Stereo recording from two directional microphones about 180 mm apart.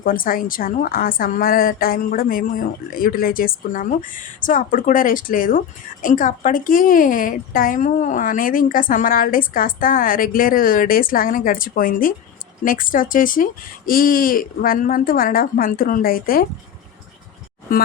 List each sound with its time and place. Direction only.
0.0 s a woman's voice: 50° left (ahead or behind)
17.7 s a woman's voice: 50° left (ahead or behind)